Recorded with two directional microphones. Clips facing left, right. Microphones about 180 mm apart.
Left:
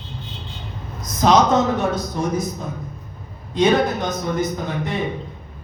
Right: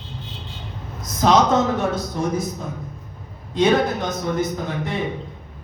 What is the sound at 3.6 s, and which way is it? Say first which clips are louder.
Speech: left 1 dB; 20° left (ahead or behind).